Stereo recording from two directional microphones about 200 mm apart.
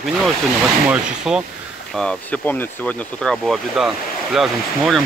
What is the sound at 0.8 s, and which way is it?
Speech, 5° right (ahead or behind).